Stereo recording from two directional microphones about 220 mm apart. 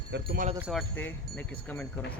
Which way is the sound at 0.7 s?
5° left (ahead or behind).